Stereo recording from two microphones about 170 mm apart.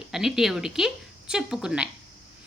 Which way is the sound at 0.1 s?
Centre (ahead or behind).